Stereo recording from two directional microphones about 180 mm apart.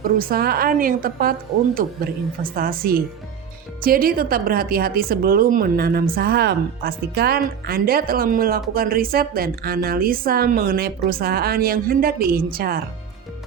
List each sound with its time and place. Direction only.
0.2 s a woman's voice: 55° right (ahead or behind)